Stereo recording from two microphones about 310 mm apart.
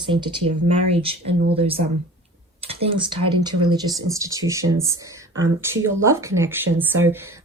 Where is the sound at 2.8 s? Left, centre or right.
Centre.